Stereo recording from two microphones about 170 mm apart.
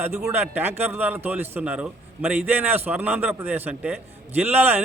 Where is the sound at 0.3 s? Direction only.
10° right (ahead or behind).